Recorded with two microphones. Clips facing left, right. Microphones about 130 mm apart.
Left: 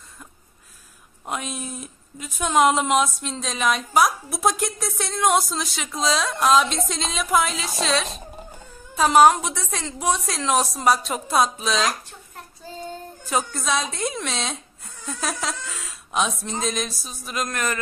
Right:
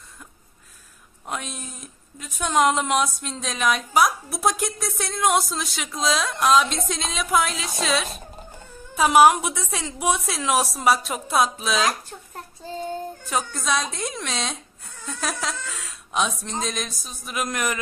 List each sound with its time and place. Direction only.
1.2 s a woman's voice: 5° left (ahead or behind)
12.6 s child singing: 25° right (ahead or behind)
13.2 s a woman's voice: centre (ahead or behind)